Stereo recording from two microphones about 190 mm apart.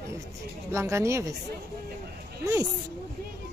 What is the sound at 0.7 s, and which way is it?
Speech, 15° right (ahead or behind).